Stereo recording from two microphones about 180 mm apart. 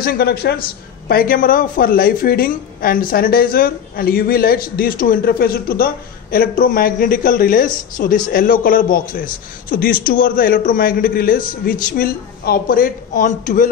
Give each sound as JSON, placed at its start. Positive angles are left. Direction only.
{"t": 0.0, "sound": "speech", "side_deg": 60}